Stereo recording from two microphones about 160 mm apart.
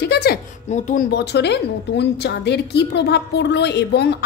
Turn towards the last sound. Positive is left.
turn(degrees=90)